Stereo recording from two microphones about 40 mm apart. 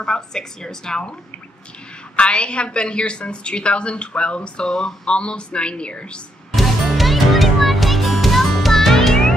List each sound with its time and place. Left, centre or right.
0.0 s a woman's voice: centre
2.1 s a woman's voice: left
6.5 s music: centre